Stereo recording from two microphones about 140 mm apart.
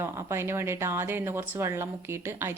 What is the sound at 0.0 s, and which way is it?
Speech, 20° right (ahead or behind).